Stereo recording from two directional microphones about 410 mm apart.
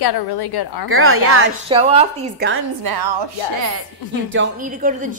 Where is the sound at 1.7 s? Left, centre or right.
Centre.